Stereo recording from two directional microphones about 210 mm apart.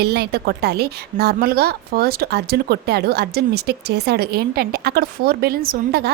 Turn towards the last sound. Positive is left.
turn(degrees=-45)  # may be behind; listen again after turning